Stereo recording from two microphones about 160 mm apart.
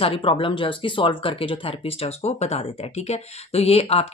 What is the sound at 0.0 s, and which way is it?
A woman's voice, 35° left (ahead or behind).